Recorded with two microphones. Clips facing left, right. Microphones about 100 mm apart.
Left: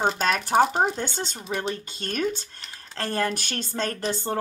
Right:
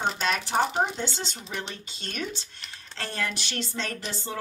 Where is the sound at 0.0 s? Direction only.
45° left (ahead or behind).